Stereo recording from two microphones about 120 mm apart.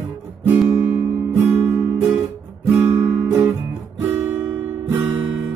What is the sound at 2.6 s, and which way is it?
Guitar, 15° right (ahead or behind).